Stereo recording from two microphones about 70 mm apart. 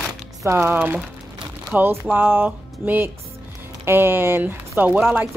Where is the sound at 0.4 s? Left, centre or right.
Right.